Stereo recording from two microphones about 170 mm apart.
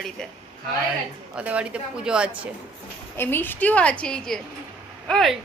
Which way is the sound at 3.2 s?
10° left (ahead or behind).